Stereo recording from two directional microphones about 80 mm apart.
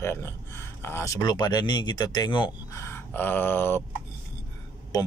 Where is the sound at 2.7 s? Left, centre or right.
Left.